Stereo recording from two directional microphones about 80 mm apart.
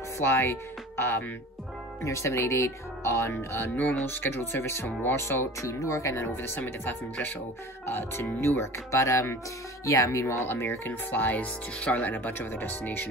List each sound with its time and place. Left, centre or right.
0.2 s speech: left